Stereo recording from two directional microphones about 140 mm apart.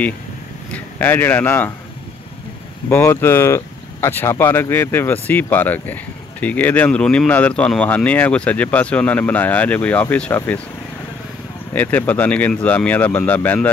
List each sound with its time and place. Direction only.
0.7 s speech: 15° left (ahead or behind)
2.9 s speech: 15° left (ahead or behind)
11.7 s speech: 10° left (ahead or behind)